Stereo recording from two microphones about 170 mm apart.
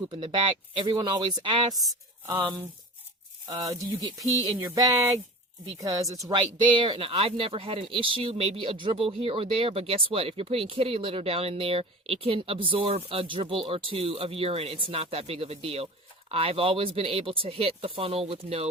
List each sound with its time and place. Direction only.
0.1 s speech: 30° right (ahead or behind)